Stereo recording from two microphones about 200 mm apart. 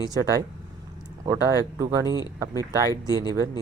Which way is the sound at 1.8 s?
15° right (ahead or behind).